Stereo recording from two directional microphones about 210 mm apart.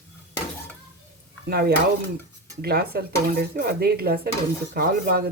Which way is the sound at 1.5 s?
50° right (ahead or behind).